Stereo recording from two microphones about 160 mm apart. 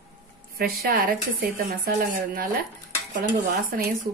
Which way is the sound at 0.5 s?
70° right (ahead or behind).